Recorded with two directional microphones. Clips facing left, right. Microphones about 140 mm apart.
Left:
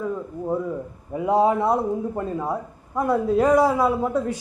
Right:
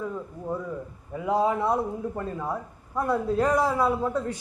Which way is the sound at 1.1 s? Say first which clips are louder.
Left 5 dB; 25° left (ahead or behind).